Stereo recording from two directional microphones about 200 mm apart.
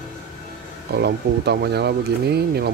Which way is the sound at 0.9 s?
55° right (ahead or behind).